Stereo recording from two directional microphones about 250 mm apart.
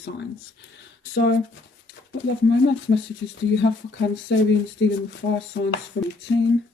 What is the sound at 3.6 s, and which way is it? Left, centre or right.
Speech, left.